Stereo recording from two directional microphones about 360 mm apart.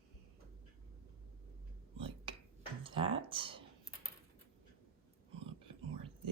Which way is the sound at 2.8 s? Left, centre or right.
Centre.